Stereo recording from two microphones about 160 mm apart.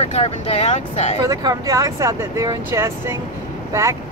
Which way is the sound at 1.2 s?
20° right (ahead or behind).